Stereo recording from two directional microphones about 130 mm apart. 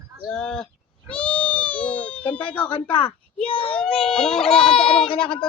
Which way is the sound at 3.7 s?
5° left (ahead or behind).